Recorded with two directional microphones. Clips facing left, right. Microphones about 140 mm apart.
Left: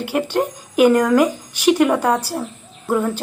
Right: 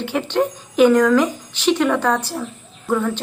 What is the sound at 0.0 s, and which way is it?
A woman's voice, 10° left (ahead or behind).